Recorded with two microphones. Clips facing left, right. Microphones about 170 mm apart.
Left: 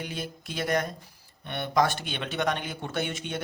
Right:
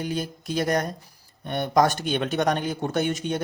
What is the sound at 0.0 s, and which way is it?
Speech, 40° right (ahead or behind).